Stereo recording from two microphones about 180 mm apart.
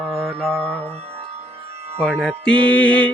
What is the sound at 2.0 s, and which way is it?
Music, 5° left (ahead or behind).